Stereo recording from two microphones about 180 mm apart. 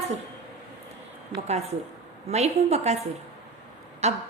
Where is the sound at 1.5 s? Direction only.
35° right (ahead or behind).